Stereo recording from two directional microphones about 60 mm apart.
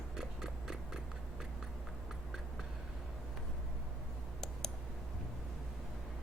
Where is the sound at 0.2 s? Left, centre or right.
Centre.